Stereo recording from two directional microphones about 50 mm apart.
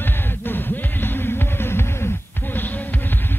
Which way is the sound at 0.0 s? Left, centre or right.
Left.